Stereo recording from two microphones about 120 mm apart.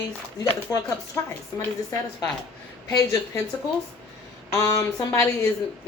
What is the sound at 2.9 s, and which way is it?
Speech, 25° left (ahead or behind).